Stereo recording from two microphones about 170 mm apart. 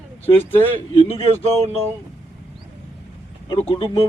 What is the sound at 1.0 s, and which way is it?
Speech, 30° left (ahead or behind).